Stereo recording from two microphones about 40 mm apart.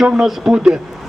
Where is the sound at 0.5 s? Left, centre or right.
Centre.